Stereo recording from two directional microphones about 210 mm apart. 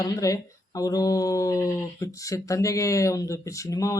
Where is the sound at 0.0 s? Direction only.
15° left (ahead or behind).